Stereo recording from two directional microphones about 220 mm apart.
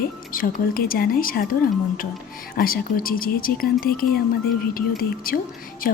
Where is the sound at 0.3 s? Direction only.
40° left (ahead or behind).